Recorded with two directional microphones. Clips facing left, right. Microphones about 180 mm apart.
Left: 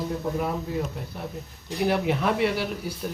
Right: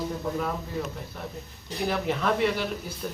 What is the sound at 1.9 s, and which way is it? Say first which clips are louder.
A man's voice: left 1 dB; 10° left (ahead or behind).